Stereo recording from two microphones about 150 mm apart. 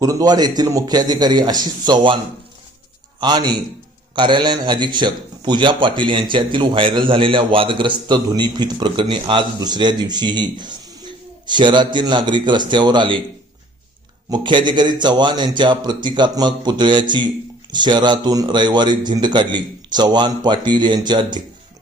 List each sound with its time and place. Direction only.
0.0 s speech: 25° right (ahead or behind)
3.2 s a man's voice: 30° right (ahead or behind)
14.3 s a man's voice: 30° right (ahead or behind)